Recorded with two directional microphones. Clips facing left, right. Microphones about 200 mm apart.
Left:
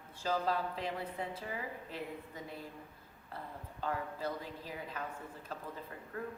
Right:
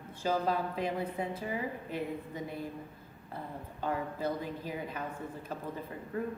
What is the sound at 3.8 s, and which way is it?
A woman's voice, 15° right (ahead or behind).